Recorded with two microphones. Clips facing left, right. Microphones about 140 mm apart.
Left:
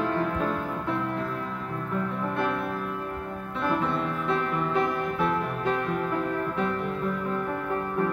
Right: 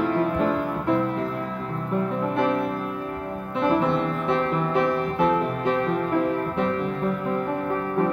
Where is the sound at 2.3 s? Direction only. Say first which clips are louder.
Right 6 dB; 65° right (ahead or behind).